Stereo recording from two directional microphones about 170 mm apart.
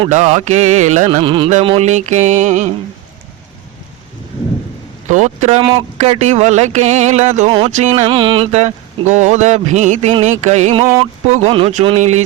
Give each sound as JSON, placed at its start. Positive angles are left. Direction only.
{"t": 0.1, "sound": "music", "side_deg": -45}
{"t": 5.0, "sound": "music", "side_deg": -45}
{"t": 8.0, "sound": "a sound", "side_deg": -30}